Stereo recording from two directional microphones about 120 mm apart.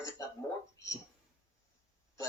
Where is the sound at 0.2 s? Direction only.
30° left (ahead or behind).